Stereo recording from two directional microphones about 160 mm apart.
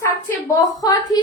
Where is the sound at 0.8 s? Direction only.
25° left (ahead or behind).